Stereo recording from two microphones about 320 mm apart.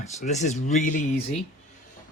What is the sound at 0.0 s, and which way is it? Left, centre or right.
Speech, left.